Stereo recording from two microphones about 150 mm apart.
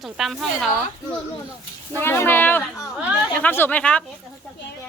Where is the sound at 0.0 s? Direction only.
Centre (ahead or behind).